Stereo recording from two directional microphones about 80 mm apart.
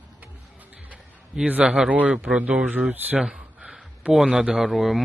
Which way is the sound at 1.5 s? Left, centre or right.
Centre.